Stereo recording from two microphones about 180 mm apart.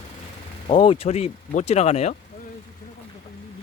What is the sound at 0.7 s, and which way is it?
Speech, 30° left (ahead or behind).